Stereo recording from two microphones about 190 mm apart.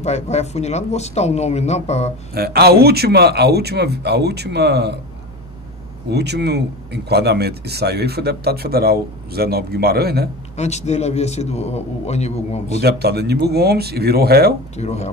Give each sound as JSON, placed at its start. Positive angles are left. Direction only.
{"t": 0.0, "sound": "a man's voice", "side_deg": 35}
{"t": 2.3, "sound": "speech", "side_deg": -55}
{"t": 6.0, "sound": "speech", "side_deg": -60}
{"t": 10.5, "sound": "a man's voice", "side_deg": 35}
{"t": 12.8, "sound": "speech", "side_deg": -60}
{"t": 14.8, "sound": "a man's voice", "side_deg": 35}